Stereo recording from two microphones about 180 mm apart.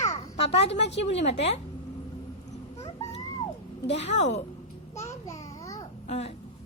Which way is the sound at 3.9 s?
35° left (ahead or behind).